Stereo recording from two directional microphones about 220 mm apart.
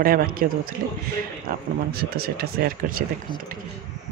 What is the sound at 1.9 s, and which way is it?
Speech, 45° right (ahead or behind).